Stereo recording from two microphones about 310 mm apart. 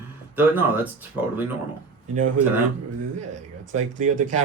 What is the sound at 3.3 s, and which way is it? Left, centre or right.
Speech, right.